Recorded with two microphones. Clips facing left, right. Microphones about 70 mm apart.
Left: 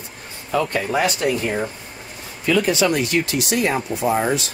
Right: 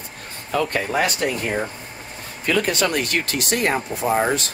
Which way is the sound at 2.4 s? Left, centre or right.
Right.